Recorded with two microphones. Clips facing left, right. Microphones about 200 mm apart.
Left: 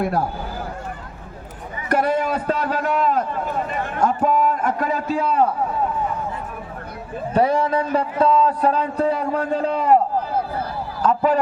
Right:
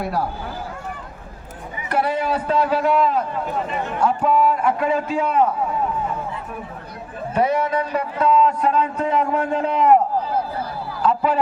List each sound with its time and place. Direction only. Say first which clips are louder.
1.9 s a man's voice: left 1 dB; 45° left (ahead or behind)
7.3 s speech: left 1 dB; 30° left (ahead or behind)
11.0 s a sound: left 1 dB; 45° left (ahead or behind)